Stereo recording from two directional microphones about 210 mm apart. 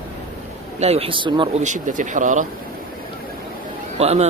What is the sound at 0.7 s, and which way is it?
Speech, 30° right (ahead or behind).